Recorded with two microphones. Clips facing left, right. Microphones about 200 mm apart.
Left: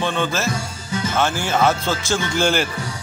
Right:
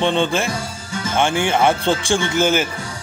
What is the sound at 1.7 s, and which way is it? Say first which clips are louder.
Speech: right 3 dB; 30° right (ahead or behind).